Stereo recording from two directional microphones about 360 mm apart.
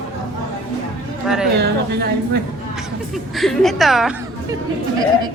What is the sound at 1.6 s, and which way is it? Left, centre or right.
Speech, right.